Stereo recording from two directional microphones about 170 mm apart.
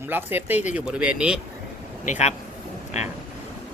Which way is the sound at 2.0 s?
45° left (ahead or behind).